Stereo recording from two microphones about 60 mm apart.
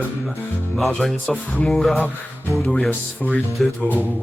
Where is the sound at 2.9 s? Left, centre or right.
Left.